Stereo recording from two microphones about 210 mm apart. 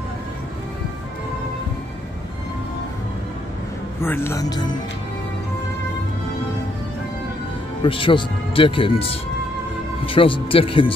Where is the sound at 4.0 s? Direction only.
10° left (ahead or behind).